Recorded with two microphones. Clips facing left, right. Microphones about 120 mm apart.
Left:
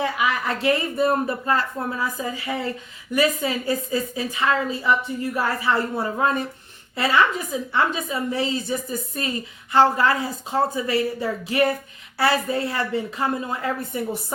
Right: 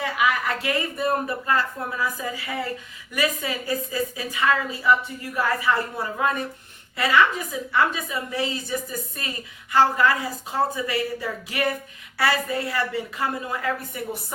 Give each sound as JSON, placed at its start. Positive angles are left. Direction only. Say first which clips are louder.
{"t": 0.0, "sound": "a woman's voice", "louder": "even", "side_deg": 25}
{"t": 9.7, "sound": "a woman's voice", "louder": "left 2 dB", "side_deg": 25}